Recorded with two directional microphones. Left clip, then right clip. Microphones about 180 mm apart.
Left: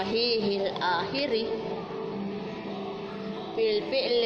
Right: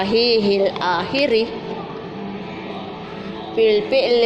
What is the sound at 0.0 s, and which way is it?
Speech, 40° right (ahead or behind).